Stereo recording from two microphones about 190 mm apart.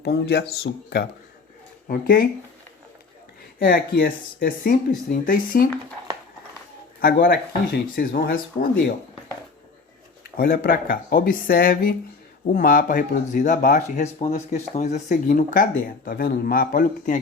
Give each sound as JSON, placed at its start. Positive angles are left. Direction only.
{"t": 0.0, "sound": "speech", "side_deg": 60}
{"t": 3.6, "sound": "speech", "side_deg": 55}
{"t": 4.4, "sound": "speech", "side_deg": 50}
{"t": 7.0, "sound": "speech", "side_deg": 50}
{"t": 10.2, "sound": "speech", "side_deg": 50}